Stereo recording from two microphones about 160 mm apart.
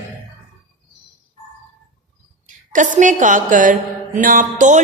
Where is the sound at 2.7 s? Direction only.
50° right (ahead or behind).